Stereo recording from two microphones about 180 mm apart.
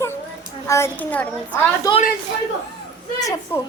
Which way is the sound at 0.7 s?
10° left (ahead or behind).